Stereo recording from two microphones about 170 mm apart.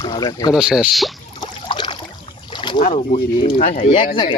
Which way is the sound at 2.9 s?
35° left (ahead or behind).